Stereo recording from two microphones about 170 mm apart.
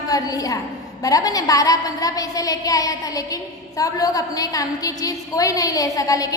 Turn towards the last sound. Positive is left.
turn(degrees=20)  # may be behind; listen again after turning